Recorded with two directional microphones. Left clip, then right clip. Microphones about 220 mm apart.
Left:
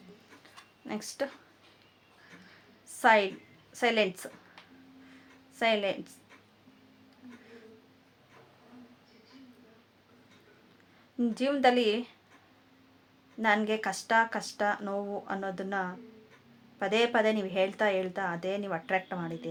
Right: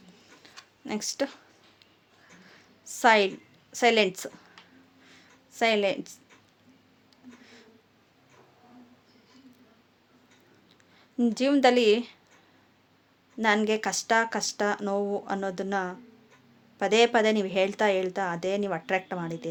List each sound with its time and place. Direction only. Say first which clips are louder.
0.9 s a woman's voice: right 5 dB; 45° right (ahead or behind)
2.8 s a woman's voice: right 3 dB; 45° right (ahead or behind)
5.5 s a woman's voice: right 4 dB; 45° right (ahead or behind)
11.2 s a woman's voice: right 4 dB; 45° right (ahead or behind)
13.4 s a woman's voice: right 3 dB; 45° right (ahead or behind)